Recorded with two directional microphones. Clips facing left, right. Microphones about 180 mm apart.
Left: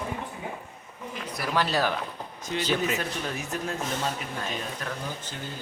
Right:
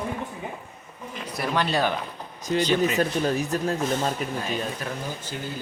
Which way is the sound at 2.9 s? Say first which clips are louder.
Right 9 dB; 35° right (ahead or behind).